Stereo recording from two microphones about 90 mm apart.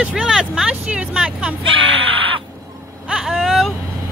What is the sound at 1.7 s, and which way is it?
Speech, 80° right.